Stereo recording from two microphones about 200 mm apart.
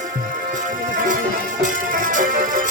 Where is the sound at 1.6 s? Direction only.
40° right (ahead or behind).